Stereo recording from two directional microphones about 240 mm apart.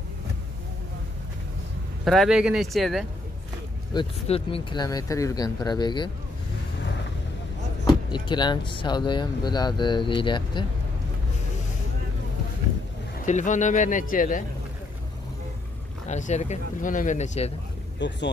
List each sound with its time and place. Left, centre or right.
2.0 s speech: centre
3.9 s speech: left
7.8 s speech: centre
13.2 s speech: left
16.1 s speech: left
17.9 s speech: left